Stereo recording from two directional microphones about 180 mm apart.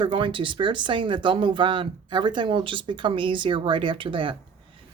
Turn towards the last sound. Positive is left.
turn(degrees=-30)  # may be behind; listen again after turning